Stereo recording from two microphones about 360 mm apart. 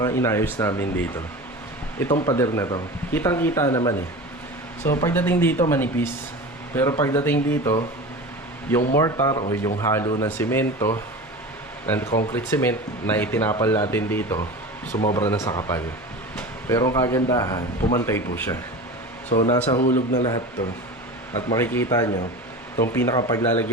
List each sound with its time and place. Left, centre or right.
0.0 s speech: centre
2.1 s speech: centre
9.0 s speech: centre
19.3 s speech: centre